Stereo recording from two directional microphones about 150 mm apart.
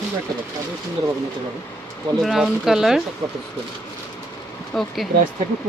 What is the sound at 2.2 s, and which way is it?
Speech, centre (ahead or behind).